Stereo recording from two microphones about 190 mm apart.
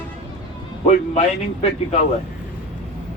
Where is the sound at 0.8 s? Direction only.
35° left (ahead or behind).